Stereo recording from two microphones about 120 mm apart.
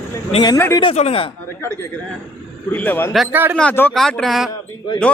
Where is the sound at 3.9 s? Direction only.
5° left (ahead or behind).